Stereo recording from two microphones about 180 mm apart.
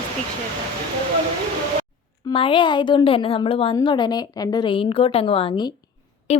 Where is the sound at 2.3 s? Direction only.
30° left (ahead or behind).